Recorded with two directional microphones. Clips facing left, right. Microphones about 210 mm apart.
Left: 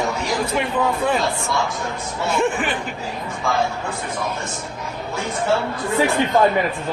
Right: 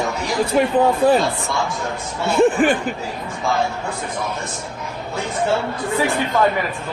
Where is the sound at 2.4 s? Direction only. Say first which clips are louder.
Right 8 dB; 40° right (ahead or behind).